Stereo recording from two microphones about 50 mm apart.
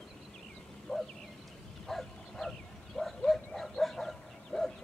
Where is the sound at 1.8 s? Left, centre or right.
Centre.